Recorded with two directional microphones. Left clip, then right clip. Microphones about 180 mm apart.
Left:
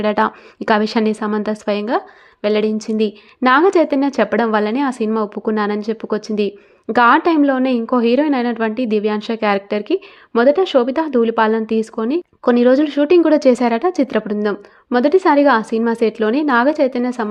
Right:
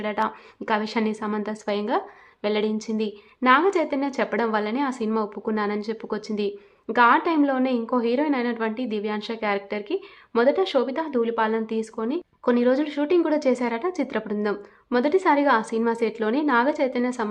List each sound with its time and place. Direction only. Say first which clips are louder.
0.0 s a woman's voice: left 9 dB; 35° left (ahead or behind)